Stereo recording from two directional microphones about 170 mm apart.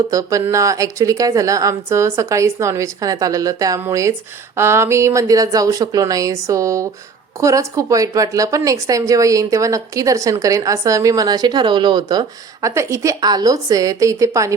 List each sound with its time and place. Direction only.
0.1 s speech: 20° right (ahead or behind)